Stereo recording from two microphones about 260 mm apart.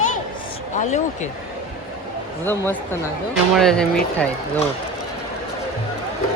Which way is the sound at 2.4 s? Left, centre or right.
Centre.